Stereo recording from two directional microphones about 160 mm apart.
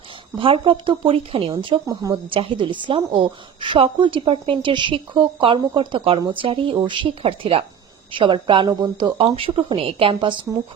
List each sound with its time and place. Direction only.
0.3 s a woman's voice: 35° right (ahead or behind)
1.9 s a woman's voice: 20° right (ahead or behind)